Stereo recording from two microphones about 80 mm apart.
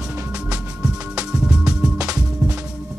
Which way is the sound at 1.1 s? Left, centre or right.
Centre.